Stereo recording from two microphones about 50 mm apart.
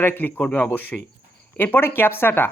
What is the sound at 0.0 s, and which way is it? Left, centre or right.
Speech, left.